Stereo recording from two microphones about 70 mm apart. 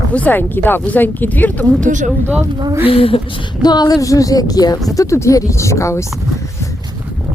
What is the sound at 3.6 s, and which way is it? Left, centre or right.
Speech, left.